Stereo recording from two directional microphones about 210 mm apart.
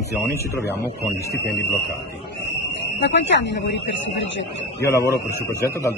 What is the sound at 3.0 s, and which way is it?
Speech, 55° left (ahead or behind).